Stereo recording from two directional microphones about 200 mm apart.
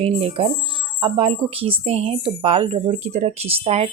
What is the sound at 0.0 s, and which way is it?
Speech, 30° right (ahead or behind).